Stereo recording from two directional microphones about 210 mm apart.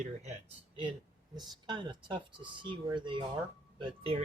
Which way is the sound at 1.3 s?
20° right (ahead or behind).